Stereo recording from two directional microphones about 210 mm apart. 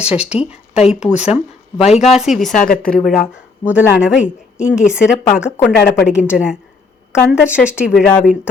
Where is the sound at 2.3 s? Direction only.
35° left (ahead or behind).